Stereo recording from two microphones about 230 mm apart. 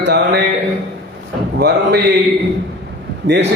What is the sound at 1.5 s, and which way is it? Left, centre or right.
Speech, right.